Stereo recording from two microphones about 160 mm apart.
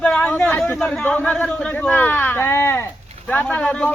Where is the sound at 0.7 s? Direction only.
5° left (ahead or behind).